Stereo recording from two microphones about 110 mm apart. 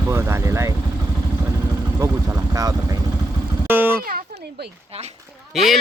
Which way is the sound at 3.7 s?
20° right (ahead or behind).